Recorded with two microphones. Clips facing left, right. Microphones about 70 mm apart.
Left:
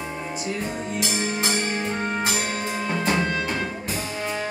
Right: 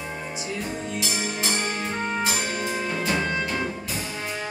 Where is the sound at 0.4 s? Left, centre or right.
Left.